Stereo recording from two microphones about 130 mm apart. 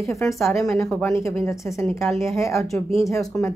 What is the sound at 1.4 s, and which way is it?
Speech, 20° left (ahead or behind).